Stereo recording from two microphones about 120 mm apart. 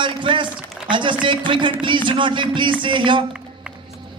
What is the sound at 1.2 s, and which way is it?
Speech, 40° right (ahead or behind).